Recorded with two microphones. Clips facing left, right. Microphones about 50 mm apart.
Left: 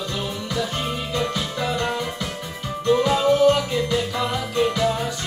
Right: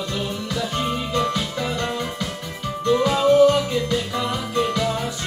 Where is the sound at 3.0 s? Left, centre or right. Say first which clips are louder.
Right 3 dB; centre.